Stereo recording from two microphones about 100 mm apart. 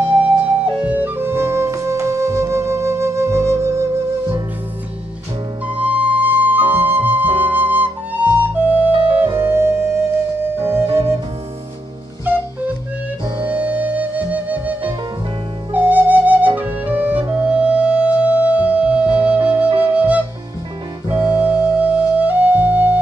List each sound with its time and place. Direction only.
0.8 s music: 20° right (ahead or behind)
5.7 s flute: 15° right (ahead or behind)
10.6 s music: 25° right (ahead or behind)
10.9 s music: 70° right (ahead or behind)
13.5 s music: 15° right (ahead or behind)
15.7 s flute: 20° right (ahead or behind)
16.5 s music: 15° right (ahead or behind)
21.1 s flute: 15° right (ahead or behind)